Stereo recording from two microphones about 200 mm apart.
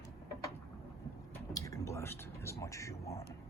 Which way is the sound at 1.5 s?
15° left (ahead or behind).